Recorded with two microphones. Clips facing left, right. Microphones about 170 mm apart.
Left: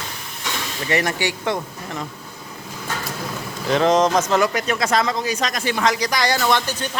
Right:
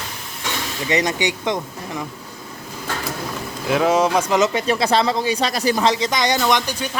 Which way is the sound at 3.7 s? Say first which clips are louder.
Even; 5° right (ahead or behind).